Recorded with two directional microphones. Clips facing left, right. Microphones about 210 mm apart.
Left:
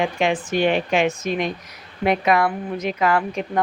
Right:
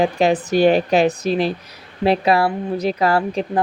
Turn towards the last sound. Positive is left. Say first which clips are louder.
# right 3 dB
turn(degrees=-30)  # may be behind; listen again after turning